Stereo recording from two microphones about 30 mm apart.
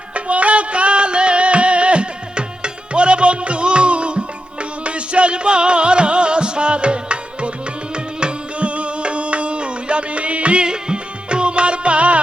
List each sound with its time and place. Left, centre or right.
0.1 s music: right
10.7 s music: right